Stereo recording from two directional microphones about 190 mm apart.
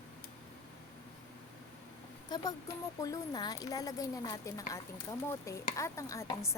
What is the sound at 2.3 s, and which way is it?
Speech, 20° left (ahead or behind).